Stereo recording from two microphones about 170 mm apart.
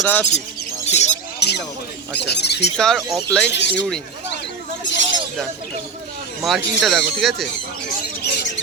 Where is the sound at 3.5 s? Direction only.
90° left.